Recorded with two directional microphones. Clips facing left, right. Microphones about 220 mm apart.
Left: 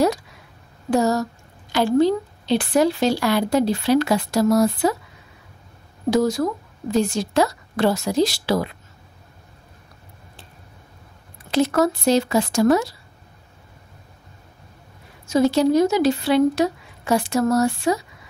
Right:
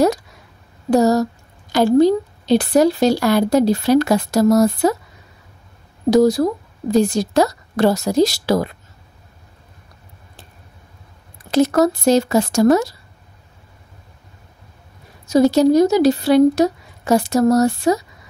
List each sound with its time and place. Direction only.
0.8 s a woman's voice: 40° right (ahead or behind)
6.0 s a woman's voice: 35° right (ahead or behind)
11.5 s speech: 40° right (ahead or behind)
15.2 s a woman's voice: 40° right (ahead or behind)